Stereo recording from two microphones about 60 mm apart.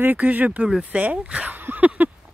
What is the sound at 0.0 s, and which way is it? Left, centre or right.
Speech, right.